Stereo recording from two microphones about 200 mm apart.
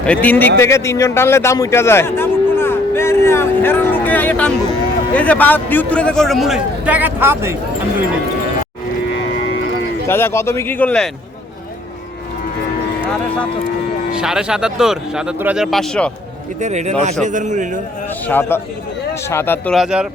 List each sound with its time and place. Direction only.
0.0 s a man's voice: 5° left (ahead or behind); by 7.5 s 10° right (ahead or behind)
10.1 s a man's voice: 10° left (ahead or behind)
14.1 s a man's voice: 5° right (ahead or behind)
16.6 s speech: 35° right (ahead or behind)
18.3 s a man's voice: 10° left (ahead or behind)
19.7 s a man's voice: centre (ahead or behind)